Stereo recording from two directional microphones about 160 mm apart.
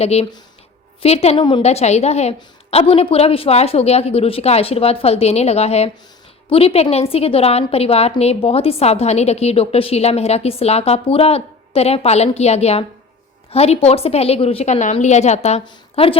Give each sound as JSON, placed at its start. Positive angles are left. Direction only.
{"t": 0.0, "sound": "a woman's voice", "side_deg": 40}